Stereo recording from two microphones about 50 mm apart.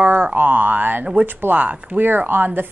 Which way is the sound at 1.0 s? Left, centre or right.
Right.